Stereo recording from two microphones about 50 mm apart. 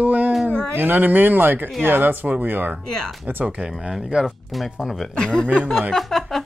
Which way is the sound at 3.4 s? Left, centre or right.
Right.